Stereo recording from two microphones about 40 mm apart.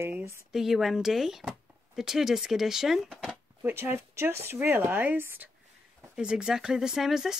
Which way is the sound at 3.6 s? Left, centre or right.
Right.